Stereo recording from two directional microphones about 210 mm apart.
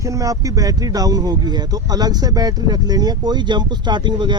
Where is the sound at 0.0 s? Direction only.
15° right (ahead or behind).